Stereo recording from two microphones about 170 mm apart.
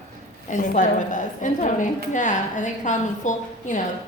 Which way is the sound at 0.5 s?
50° left (ahead or behind).